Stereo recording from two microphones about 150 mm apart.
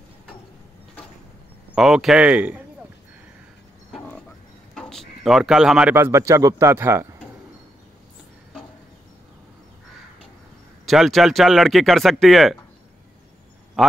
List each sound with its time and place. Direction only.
1.8 s speech: 5° right (ahead or behind)
4.7 s a sound: 5° left (ahead or behind)
5.9 s speech: 20° right (ahead or behind)
10.9 s speech: centre (ahead or behind)
13.8 s a man's voice: centre (ahead or behind)